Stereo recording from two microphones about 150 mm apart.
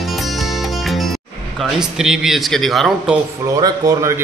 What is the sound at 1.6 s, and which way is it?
Speech, 5° right (ahead or behind).